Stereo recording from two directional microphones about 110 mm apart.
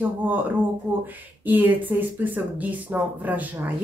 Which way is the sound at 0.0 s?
15° right (ahead or behind).